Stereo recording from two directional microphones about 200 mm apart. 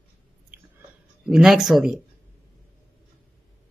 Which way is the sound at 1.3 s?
Centre (ahead or behind).